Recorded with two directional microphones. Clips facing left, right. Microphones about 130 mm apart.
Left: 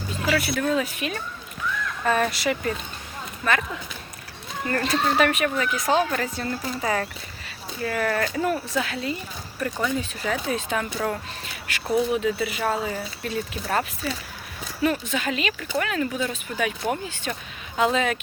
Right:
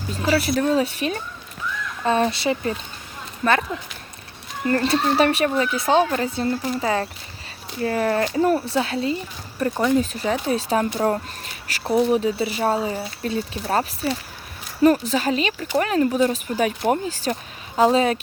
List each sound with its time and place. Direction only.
0.2 s speech: 35° right (ahead or behind)
4.6 s speech: 30° right (ahead or behind)